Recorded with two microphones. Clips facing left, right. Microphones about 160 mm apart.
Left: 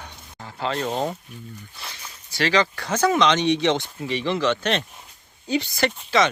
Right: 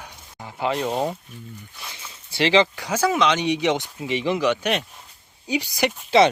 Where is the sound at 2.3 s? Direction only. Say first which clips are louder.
Right 3 dB; 20° right (ahead or behind).